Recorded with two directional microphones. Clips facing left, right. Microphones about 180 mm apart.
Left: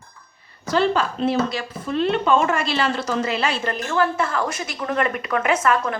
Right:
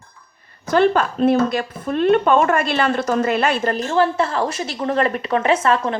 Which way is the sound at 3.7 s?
30° right (ahead or behind).